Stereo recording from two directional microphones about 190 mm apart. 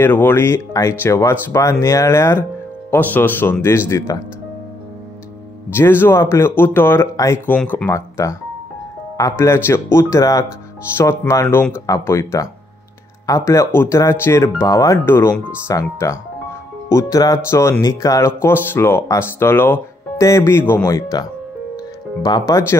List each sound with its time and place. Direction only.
0.0 s speech: 10° left (ahead or behind)
5.8 s speech: 10° left (ahead or behind)
13.5 s speech: 15° left (ahead or behind)
22.5 s speech: 15° left (ahead or behind)